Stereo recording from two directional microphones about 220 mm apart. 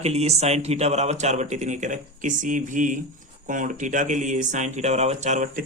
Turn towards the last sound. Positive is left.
turn(degrees=-35)  # may be behind; listen again after turning